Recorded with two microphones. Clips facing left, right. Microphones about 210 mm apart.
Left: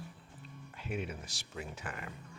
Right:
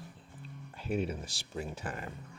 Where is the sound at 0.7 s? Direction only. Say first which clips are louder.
Right 6 dB; 35° right (ahead or behind).